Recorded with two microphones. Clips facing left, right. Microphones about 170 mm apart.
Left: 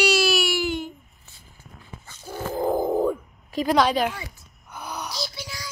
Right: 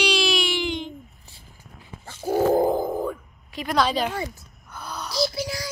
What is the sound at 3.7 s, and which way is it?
Speech, 15° left (ahead or behind).